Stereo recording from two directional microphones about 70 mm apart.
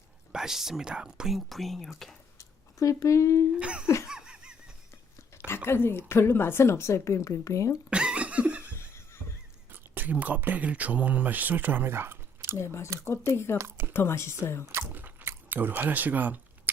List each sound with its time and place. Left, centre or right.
0.3 s speech: centre
2.9 s speech: left
3.6 s cough: centre
3.8 s laughter: left
4.1 s a sound: centre
5.6 s a woman's voice: left
7.9 s laughter: centre
9.9 s speech: right
12.5 s a woman's voice: left
13.6 s speech: right
13.9 s a woman's voice: left
14.9 s a sound: right